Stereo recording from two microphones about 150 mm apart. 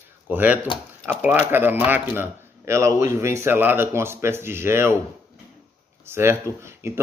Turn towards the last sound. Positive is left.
turn(degrees=-20)  # may be behind; listen again after turning